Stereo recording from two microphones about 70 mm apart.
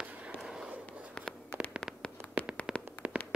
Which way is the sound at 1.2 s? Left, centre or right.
Centre.